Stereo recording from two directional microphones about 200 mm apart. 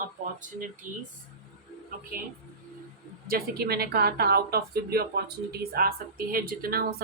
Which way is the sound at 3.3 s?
50° right (ahead or behind).